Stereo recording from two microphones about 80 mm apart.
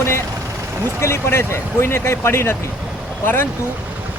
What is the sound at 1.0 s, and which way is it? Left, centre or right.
Speech, left.